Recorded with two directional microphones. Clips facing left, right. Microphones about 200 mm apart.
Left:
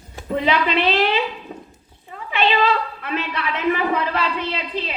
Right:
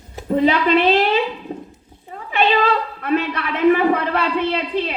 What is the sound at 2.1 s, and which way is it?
Cat, 45° right (ahead or behind).